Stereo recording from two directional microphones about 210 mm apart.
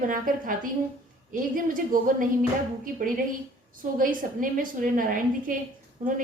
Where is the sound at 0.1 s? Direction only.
40° right (ahead or behind).